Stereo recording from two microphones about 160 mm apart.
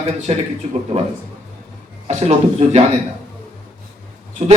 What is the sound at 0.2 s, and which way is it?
Music, 45° right (ahead or behind).